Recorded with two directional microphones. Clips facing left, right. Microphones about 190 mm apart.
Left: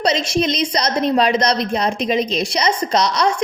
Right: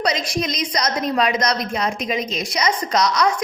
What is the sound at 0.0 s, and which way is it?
A woman's voice, 25° left (ahead or behind).